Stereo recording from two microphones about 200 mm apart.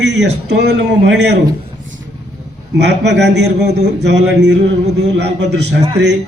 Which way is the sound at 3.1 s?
60° right (ahead or behind).